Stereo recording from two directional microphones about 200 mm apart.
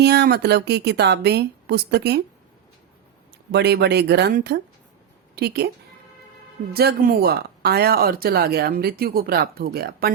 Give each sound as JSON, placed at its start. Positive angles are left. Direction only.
{"t": 0.0, "sound": "speech", "side_deg": -55}
{"t": 3.5, "sound": "speech", "side_deg": -55}
{"t": 6.7, "sound": "speech", "side_deg": -45}